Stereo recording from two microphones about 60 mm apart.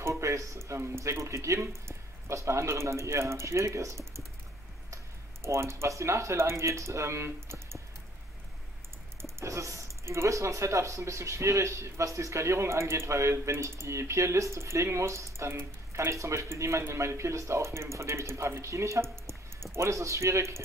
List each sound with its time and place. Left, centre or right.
0.0 s speech: right
9.2 s speech: right